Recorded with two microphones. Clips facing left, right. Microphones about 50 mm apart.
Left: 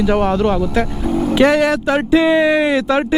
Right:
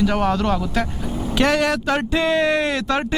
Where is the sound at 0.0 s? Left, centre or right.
Centre.